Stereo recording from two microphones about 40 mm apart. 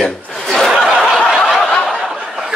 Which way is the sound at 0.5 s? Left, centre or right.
Centre.